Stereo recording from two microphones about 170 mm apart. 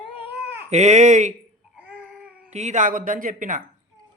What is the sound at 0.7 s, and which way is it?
Speech, 40° right (ahead or behind).